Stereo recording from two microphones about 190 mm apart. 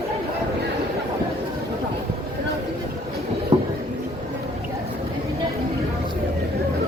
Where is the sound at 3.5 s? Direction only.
30° right (ahead or behind).